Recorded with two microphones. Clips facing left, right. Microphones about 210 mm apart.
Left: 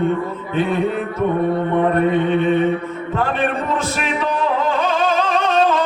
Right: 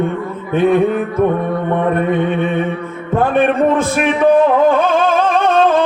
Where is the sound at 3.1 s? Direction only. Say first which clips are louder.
Right 8 dB; 55° right (ahead or behind).